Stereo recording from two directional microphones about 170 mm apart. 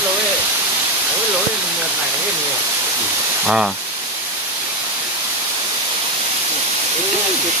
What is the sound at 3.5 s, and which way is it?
Speech, 5° right (ahead or behind).